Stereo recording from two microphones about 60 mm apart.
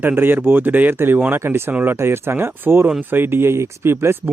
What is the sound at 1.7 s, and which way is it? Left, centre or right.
Speech, right.